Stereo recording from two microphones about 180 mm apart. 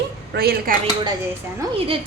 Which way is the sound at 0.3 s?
55° right (ahead or behind).